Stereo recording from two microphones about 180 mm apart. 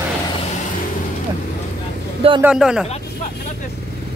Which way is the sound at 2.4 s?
5° right (ahead or behind).